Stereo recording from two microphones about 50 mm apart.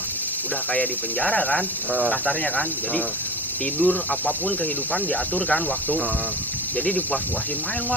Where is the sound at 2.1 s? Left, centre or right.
Left.